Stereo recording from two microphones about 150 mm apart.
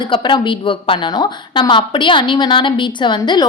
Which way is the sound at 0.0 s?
30° left (ahead or behind).